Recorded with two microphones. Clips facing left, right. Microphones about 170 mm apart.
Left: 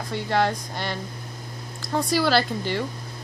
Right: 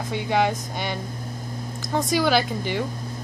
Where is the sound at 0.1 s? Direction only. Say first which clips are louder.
Right 1 dB; 5° right (ahead or behind).